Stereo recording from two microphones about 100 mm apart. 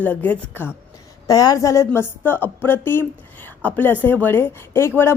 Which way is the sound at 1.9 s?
20° left (ahead or behind).